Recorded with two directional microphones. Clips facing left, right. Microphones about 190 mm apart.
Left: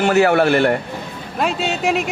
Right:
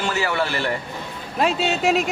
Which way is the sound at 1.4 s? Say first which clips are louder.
Even; centre (ahead or behind).